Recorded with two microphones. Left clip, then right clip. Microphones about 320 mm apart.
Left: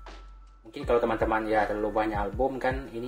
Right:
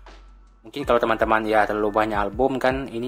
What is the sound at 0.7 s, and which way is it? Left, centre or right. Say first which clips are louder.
Speech: right 5 dB; right.